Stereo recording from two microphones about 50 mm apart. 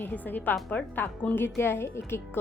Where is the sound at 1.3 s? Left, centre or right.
Left.